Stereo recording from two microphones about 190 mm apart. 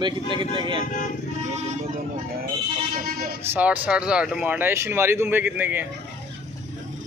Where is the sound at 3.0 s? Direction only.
50° right (ahead or behind).